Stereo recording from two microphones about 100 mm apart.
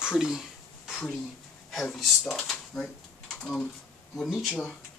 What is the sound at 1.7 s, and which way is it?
Speech, centre (ahead or behind).